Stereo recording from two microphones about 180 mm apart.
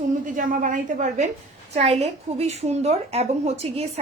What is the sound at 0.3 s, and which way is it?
A woman's voice, 50° right (ahead or behind).